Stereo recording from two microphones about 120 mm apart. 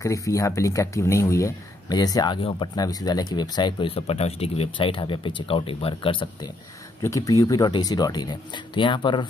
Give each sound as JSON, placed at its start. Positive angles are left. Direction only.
{"t": 0.0, "sound": "speech", "side_deg": 25}
{"t": 4.7, "sound": "speech", "side_deg": 45}
{"t": 7.0, "sound": "speech", "side_deg": 25}